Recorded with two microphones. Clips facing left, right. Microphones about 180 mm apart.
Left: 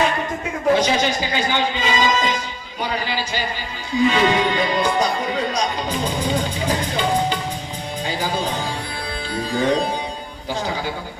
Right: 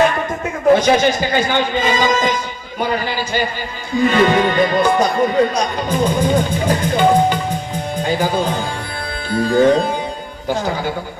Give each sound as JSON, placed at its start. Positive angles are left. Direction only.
{"t": 0.8, "sound": "a man's voice", "side_deg": -50}